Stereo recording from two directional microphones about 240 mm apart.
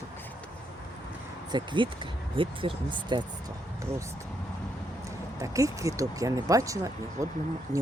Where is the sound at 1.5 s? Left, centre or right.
Centre.